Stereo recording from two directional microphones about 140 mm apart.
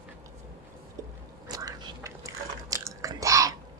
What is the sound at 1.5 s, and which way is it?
Chewing, 25° right (ahead or behind).